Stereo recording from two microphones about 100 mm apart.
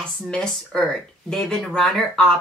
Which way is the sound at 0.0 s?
5° left (ahead or behind).